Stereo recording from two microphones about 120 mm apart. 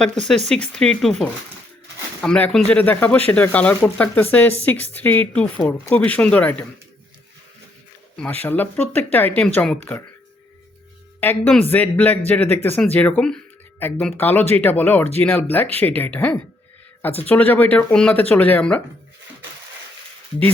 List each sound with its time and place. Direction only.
0.0 s speech: 5° left (ahead or behind)
8.1 s speech: 10° left (ahead or behind)
11.2 s speech: 15° left (ahead or behind)